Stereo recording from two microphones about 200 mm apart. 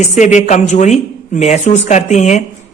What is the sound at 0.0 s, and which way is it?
A man's voice, 35° left (ahead or behind).